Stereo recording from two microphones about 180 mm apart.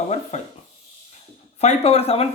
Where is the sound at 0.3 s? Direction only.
35° left (ahead or behind).